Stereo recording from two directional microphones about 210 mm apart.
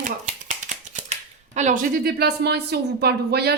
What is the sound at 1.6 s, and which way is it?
A woman's voice, 35° right (ahead or behind).